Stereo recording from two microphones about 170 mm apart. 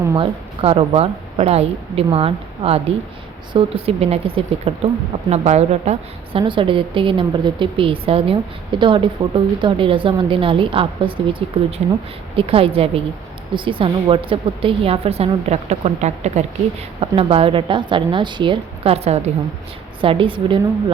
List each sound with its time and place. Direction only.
0.2 s a woman's voice: 35° right (ahead or behind)